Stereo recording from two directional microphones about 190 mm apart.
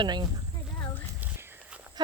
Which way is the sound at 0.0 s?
25° right (ahead or behind).